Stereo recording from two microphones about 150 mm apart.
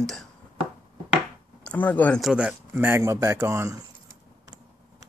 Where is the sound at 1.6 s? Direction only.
10° left (ahead or behind).